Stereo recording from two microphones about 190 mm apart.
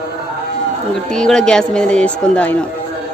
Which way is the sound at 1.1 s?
5° left (ahead or behind).